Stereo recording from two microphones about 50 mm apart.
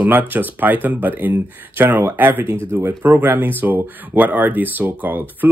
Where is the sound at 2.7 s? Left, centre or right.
Right.